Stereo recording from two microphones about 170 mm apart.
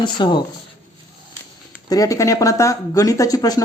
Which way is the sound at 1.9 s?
20° left (ahead or behind).